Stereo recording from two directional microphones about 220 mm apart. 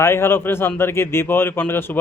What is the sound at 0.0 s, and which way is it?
Speech, 10° left (ahead or behind).